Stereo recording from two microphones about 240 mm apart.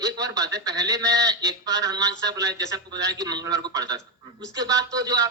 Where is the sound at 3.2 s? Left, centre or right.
Centre.